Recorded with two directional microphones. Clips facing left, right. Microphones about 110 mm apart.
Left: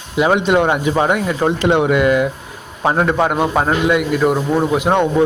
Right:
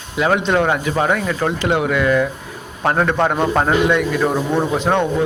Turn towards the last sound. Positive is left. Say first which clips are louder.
# left 2 dB
turn(degrees=15)  # may be behind; listen again after turning